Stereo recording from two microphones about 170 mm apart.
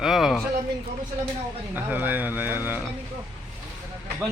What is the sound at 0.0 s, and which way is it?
Speech, centre (ahead or behind).